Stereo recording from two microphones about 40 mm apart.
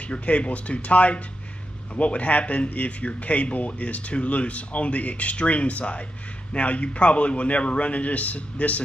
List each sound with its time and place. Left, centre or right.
0.0 s speech: left